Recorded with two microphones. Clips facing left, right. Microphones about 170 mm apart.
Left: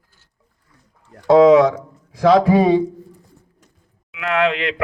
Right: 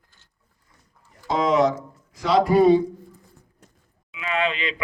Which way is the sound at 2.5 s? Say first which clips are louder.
Left 1 dB; 90° left.